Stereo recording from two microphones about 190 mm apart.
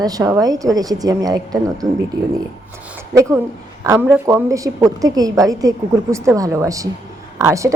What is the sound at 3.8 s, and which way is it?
A woman's voice, 15° right (ahead or behind).